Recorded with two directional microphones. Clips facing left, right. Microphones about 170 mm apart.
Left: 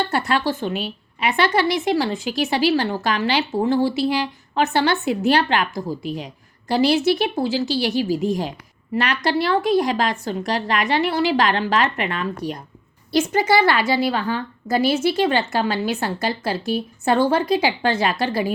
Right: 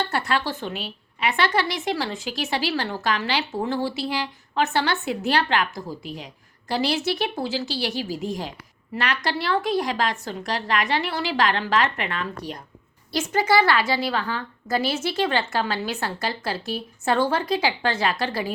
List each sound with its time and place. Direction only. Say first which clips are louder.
0.0 s a woman's voice: left 4 dB; 15° left (ahead or behind)